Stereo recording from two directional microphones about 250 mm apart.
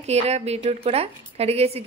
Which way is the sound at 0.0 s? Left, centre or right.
Right.